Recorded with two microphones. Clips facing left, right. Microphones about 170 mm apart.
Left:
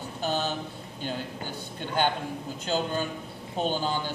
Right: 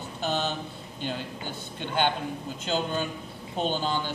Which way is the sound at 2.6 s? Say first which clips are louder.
Even; 10° left (ahead or behind).